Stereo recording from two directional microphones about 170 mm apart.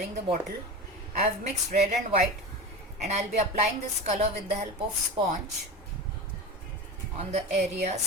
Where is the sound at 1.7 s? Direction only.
40° right (ahead or behind).